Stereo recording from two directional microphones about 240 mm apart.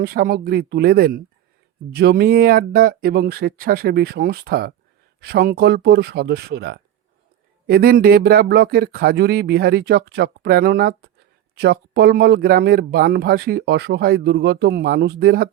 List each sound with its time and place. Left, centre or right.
0.0 s speech: right